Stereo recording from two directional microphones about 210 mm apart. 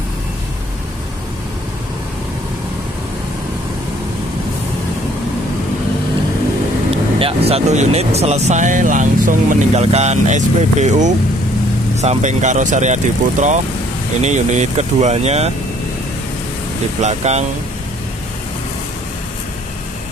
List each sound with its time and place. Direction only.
6.9 s speech: 25° right (ahead or behind)
17.0 s speech: 30° right (ahead or behind)